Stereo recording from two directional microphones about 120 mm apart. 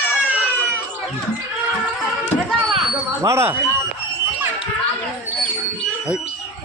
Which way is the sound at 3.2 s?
20° right (ahead or behind).